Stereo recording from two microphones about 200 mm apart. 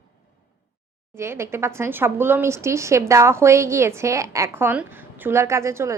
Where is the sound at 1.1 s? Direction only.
15° right (ahead or behind).